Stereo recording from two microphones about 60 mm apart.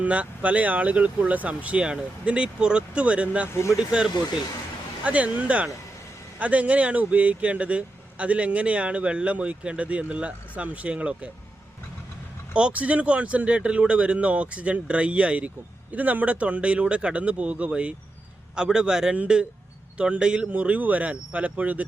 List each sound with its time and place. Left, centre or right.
0.0 s speech: right
3.5 s speech: left
3.8 s a man's voice: centre
12.5 s a man's voice: right